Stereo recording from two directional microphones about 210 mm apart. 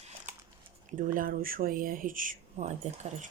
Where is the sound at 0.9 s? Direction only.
40° right (ahead or behind).